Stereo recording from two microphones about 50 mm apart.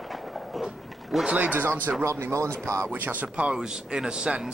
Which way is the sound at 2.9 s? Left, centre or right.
Right.